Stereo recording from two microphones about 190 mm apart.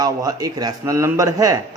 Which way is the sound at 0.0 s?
20° right (ahead or behind).